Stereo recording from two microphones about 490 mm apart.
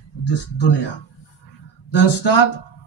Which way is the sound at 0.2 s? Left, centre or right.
Left.